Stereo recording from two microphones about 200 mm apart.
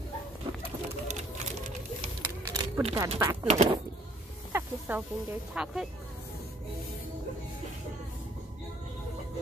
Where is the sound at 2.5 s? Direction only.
25° right (ahead or behind).